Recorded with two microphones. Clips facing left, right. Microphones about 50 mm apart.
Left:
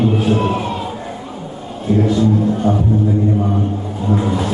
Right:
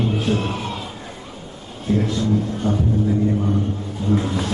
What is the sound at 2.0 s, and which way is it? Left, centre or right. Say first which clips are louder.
Speech: left 9 dB; centre.